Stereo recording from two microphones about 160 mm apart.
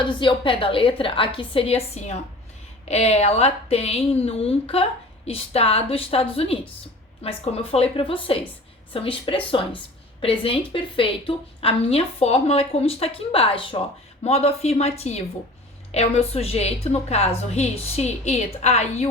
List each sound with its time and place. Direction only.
0.2 s a woman's voice: 30° left (ahead or behind)